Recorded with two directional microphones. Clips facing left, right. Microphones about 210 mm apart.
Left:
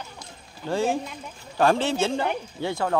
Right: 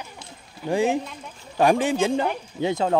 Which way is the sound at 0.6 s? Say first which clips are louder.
Right 3 dB; 15° right (ahead or behind).